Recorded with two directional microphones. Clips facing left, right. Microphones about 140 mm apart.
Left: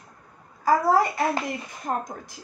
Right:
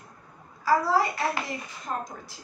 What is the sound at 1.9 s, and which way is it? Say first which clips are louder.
Speech: left 4 dB; 45° left (ahead or behind).